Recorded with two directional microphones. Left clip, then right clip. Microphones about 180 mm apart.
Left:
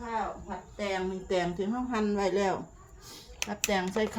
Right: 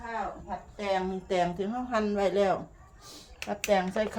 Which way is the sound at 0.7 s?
20° right (ahead or behind).